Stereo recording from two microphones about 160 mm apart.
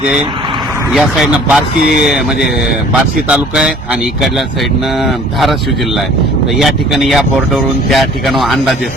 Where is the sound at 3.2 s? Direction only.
5° right (ahead or behind).